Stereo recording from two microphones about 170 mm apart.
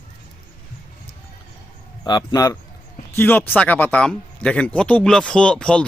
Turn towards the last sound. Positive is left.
turn(degrees=5)  # may be behind; listen again after turning